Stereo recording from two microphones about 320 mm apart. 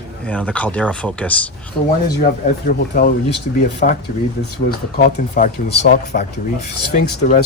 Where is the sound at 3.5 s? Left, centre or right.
Left.